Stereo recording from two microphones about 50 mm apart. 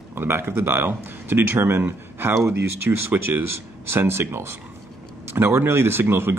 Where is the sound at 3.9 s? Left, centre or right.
Right.